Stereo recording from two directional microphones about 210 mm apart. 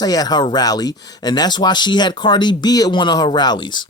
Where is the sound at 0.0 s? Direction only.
20° left (ahead or behind).